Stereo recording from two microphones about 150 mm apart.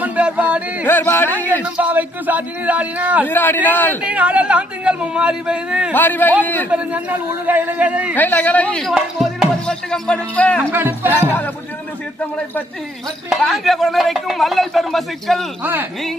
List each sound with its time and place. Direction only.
0.0 s a sound: 10° right (ahead or behind)
0.9 s a man's voice: 15° left (ahead or behind)
1.6 s speech: 10° right (ahead or behind)
3.2 s a man's voice: 15° left (ahead or behind)
4.0 s speech: 10° right (ahead or behind)
5.9 s a man's voice: 15° left (ahead or behind)
6.7 s speech: 10° right (ahead or behind)
8.1 s a man's voice: 10° left (ahead or behind)
10.6 s speech: 15° right (ahead or behind)
11.1 s a man's voice: 10° left (ahead or behind)
13.3 s speech: centre (ahead or behind)
15.6 s speech: 10° right (ahead or behind)